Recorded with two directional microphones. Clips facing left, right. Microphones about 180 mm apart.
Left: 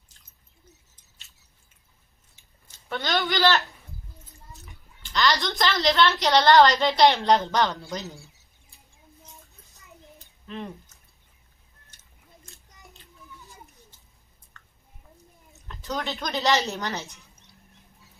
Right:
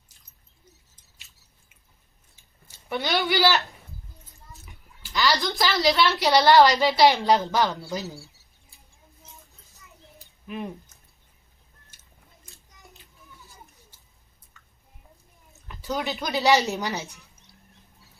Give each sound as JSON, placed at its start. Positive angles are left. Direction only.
{"t": 2.7, "sound": "speech", "side_deg": -10}
{"t": 5.0, "sound": "a woman's voice", "side_deg": -5}
{"t": 8.0, "sound": "speech", "side_deg": 15}
{"t": 10.4, "sound": "speech", "side_deg": -10}
{"t": 14.5, "sound": "a sound", "side_deg": -5}
{"t": 16.1, "sound": "a woman's voice", "side_deg": -10}